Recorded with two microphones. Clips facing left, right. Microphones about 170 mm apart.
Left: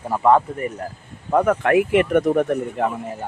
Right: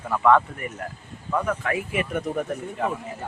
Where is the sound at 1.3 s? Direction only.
55° left (ahead or behind).